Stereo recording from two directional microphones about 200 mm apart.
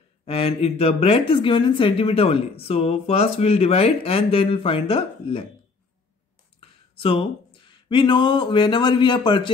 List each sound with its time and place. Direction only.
0.2 s speech: 30° left (ahead or behind)
6.6 s speech: 25° left (ahead or behind)